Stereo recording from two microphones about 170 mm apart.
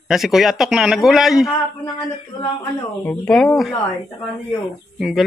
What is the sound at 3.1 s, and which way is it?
Speech, 5° left (ahead or behind).